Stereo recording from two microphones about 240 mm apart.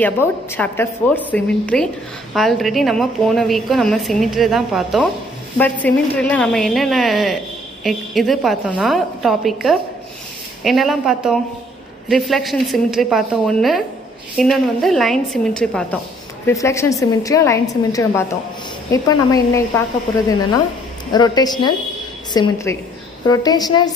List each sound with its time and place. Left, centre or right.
0.0 s a woman's voice: centre
21.1 s a woman's voice: centre